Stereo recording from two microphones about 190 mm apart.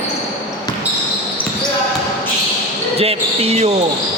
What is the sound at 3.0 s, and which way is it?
Basketball bounce, 30° right (ahead or behind).